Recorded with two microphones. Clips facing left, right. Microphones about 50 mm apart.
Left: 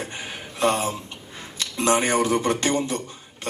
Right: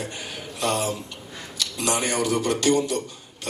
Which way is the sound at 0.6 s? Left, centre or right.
Left.